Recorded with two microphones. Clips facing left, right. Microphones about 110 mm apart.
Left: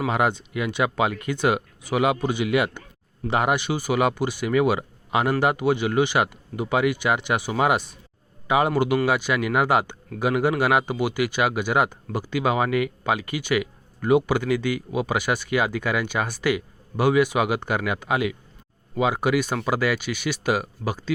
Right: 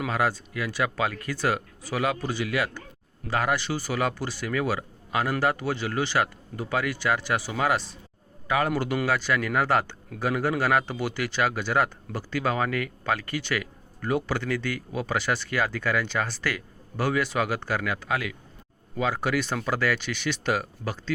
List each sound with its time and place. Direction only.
0.1 s speech: 20° left (ahead or behind)